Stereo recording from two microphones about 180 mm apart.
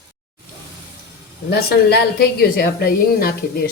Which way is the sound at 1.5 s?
65° left (ahead or behind).